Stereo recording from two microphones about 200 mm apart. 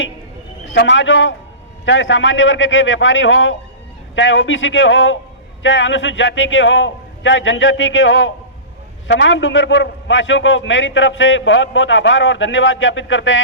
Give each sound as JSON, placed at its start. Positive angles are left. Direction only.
{"t": 0.6, "sound": "a man's voice", "side_deg": 65}